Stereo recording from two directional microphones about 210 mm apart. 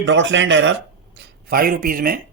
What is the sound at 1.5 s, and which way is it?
Speech, 45° right (ahead or behind).